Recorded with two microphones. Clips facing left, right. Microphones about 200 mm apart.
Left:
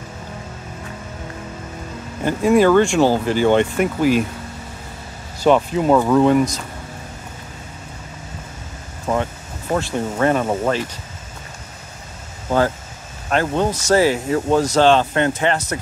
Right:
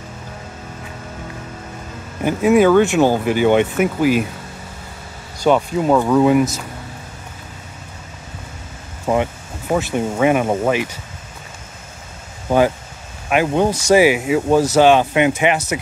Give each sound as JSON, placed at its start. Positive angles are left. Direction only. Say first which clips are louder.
{"t": 2.2, "sound": "speech", "louder": "right 1 dB", "side_deg": -5}
{"t": 5.4, "sound": "speech", "louder": "even", "side_deg": 0}
{"t": 9.0, "sound": "speech", "louder": "right 3 dB", "side_deg": -15}
{"t": 12.4, "sound": "speech", "louder": "right 3 dB", "side_deg": -15}